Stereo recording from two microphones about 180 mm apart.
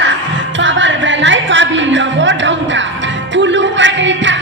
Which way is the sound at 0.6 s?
90° right.